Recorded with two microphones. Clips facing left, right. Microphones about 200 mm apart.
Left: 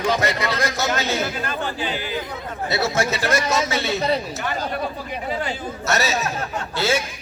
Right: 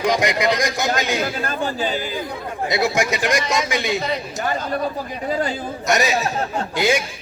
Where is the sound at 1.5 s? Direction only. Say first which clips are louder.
Right 3 dB; 40° right (ahead or behind).